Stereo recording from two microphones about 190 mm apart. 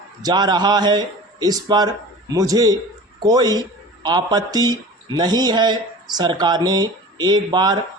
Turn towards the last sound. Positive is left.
turn(degrees=-20)  # may be behind; listen again after turning